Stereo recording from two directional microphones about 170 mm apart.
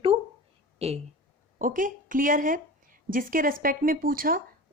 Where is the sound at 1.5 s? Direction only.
50° right (ahead or behind).